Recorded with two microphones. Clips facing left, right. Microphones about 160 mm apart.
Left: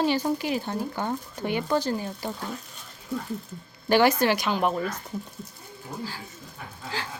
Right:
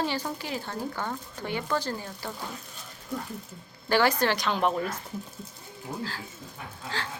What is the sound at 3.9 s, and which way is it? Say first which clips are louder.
A woman's voice: left 4 dB; 15° left (ahead or behind).